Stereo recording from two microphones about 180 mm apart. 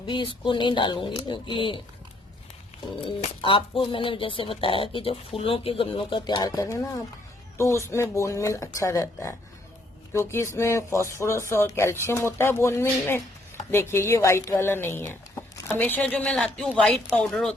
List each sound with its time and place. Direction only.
0.0 s speech: 25° left (ahead or behind)
3.4 s speech: 30° left (ahead or behind); by 17.5 s centre (ahead or behind)